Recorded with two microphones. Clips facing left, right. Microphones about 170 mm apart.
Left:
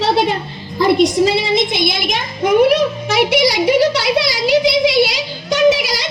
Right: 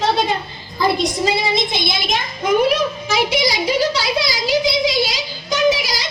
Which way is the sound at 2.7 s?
65° left (ahead or behind).